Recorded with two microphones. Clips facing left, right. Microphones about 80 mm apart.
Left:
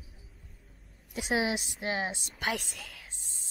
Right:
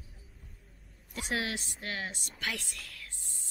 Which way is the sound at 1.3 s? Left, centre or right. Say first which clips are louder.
Left 5 dB; centre.